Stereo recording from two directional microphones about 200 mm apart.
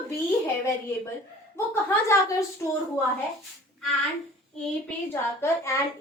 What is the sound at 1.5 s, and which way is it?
A woman's voice, 10° left (ahead or behind).